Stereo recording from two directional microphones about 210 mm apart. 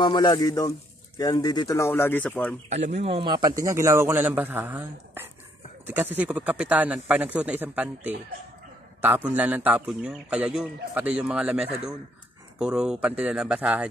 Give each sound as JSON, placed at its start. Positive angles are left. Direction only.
{"t": 0.0, "sound": "speech", "side_deg": 20}
{"t": 2.7, "sound": "a man's voice", "side_deg": -30}